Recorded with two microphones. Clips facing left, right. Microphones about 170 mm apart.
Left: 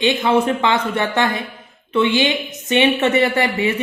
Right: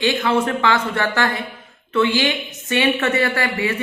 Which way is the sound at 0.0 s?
20° left (ahead or behind).